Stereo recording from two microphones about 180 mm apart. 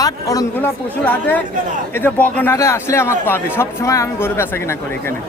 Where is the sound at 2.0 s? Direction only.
10° left (ahead or behind).